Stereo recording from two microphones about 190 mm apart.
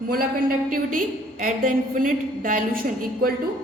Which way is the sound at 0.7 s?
45° right (ahead or behind).